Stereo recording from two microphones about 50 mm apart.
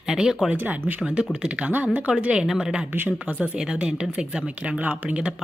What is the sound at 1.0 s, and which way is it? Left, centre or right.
Speech, centre.